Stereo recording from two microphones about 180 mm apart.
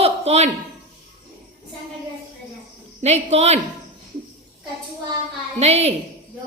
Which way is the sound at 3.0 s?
35° right (ahead or behind).